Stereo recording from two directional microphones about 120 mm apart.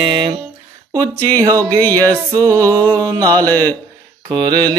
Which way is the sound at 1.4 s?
30° right (ahead or behind).